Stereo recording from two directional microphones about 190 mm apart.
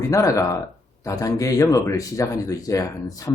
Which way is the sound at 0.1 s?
15° left (ahead or behind).